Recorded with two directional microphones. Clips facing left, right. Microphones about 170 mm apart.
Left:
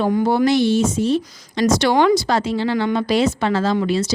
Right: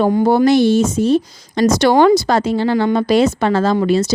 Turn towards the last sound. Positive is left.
turn(degrees=-45)  # may be behind; listen again after turning